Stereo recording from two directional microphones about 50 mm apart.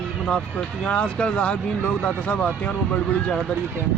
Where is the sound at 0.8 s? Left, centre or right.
Left.